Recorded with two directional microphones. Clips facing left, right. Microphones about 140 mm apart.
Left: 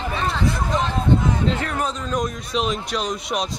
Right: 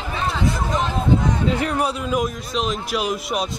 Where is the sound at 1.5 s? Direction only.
10° right (ahead or behind).